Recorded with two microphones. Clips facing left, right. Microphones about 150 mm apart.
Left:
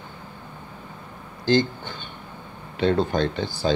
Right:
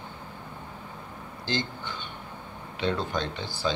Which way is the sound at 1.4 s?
45° left (ahead or behind).